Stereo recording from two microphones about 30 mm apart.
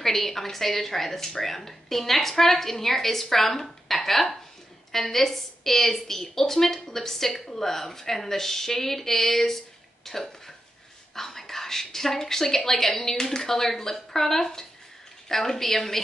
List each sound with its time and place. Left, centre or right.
0.0 s speech: centre